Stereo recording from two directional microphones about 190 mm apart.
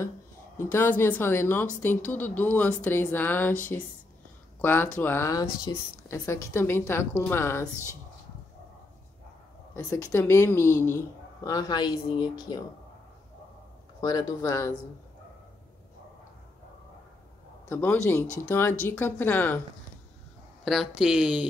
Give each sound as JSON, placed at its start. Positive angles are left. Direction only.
{"t": 0.6, "sound": "speech", "side_deg": 10}
{"t": 9.8, "sound": "speech", "side_deg": 15}
{"t": 14.0, "sound": "speech", "side_deg": 20}
{"t": 17.6, "sound": "speech", "side_deg": 15}
{"t": 20.6, "sound": "speech", "side_deg": 0}